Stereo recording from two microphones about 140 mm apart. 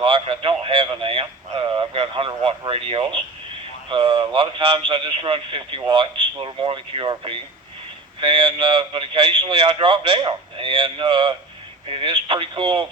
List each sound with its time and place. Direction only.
0.0 s radio: 35° right (ahead or behind)
3.8 s a man's voice: 35° right (ahead or behind)